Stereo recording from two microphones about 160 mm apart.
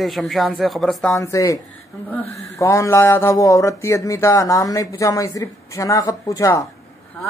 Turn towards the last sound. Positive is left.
turn(degrees=20)  # may be behind; listen again after turning